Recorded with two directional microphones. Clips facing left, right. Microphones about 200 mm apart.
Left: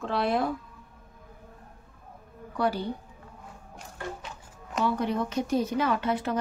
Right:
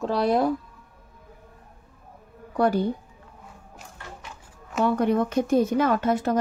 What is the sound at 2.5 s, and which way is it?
Speech, 50° right (ahead or behind).